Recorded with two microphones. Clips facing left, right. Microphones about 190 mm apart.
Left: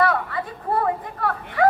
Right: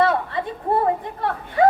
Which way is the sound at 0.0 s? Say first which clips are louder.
Right 2 dB; 25° right (ahead or behind).